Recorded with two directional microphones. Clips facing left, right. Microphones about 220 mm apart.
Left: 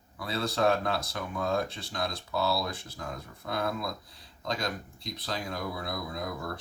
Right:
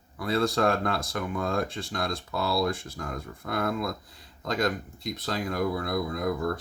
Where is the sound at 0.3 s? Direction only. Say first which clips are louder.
Right 3 dB; 50° right (ahead or behind).